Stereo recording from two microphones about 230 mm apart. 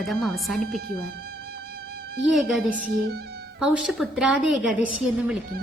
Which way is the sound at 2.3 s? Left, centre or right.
Centre.